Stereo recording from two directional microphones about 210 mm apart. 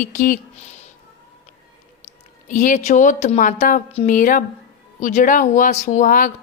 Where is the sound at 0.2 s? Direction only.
40° left (ahead or behind).